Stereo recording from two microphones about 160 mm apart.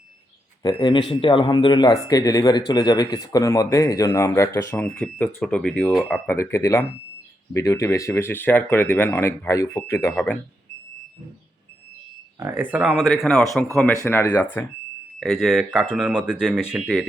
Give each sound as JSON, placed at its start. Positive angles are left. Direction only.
{"t": 0.6, "sound": "speech", "side_deg": 25}
{"t": 6.2, "sound": "speech", "side_deg": 15}
{"t": 12.4, "sound": "speech", "side_deg": -15}
{"t": 12.7, "sound": "speech", "side_deg": -5}
{"t": 14.0, "sound": "speech", "side_deg": 15}
{"t": 15.2, "sound": "speech", "side_deg": 0}